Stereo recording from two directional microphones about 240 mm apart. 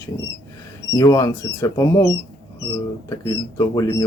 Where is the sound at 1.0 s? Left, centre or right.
Centre.